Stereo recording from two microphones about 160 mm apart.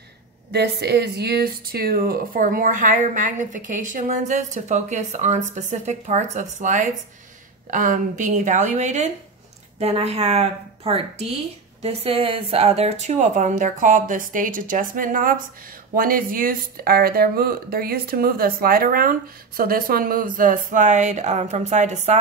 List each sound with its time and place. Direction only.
0.5 s speech: 90° right; by 22.2 s 45° right (ahead or behind)